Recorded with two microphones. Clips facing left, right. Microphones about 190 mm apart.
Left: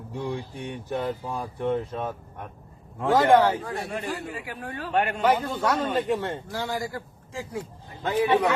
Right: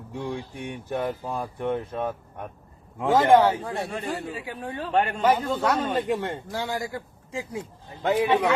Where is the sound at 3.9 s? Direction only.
30° right (ahead or behind).